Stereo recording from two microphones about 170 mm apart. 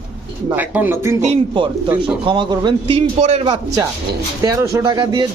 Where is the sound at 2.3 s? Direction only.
30° right (ahead or behind).